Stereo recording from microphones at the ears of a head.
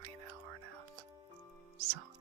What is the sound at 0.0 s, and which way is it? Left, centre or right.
Whispering, right.